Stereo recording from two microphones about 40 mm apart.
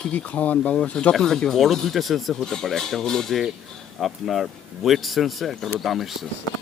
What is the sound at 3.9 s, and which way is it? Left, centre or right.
Speech, centre.